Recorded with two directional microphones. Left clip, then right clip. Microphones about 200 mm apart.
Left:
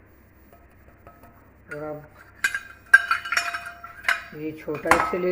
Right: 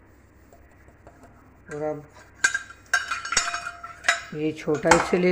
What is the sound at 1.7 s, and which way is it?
Speech, 35° right (ahead or behind).